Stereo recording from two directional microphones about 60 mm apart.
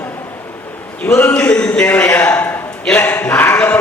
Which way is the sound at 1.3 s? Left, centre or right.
Centre.